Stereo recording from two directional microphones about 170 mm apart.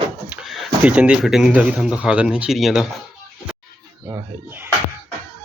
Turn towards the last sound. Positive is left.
turn(degrees=-15)  # may be behind; listen again after turning